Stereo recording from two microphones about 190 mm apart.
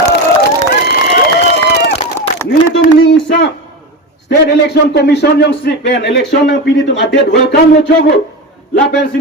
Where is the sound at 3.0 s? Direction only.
65° left (ahead or behind).